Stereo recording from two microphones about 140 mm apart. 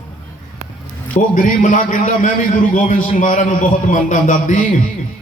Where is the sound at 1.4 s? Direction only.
75° left (ahead or behind).